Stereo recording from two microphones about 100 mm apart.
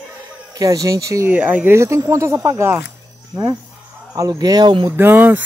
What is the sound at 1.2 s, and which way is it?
Speech, 15° right (ahead or behind).